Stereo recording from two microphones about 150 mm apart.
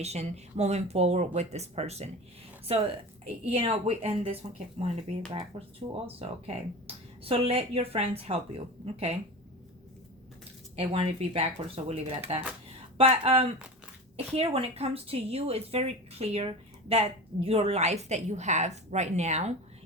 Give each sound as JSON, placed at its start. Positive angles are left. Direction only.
{"t": 0.0, "sound": "a woman's voice", "side_deg": -45}
{"t": 10.8, "sound": "a woman's voice", "side_deg": -40}